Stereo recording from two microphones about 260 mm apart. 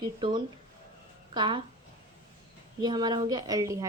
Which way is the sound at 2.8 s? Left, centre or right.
Centre.